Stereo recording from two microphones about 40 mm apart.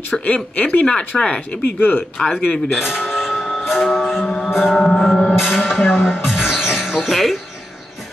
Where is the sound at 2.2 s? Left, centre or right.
Centre.